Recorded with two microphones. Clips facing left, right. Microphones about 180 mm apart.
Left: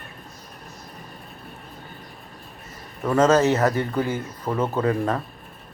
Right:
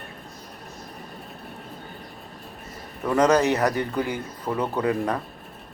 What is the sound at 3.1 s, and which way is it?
Speech, 15° right (ahead or behind).